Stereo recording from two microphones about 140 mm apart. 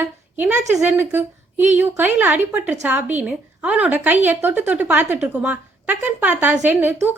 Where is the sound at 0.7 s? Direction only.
15° right (ahead or behind).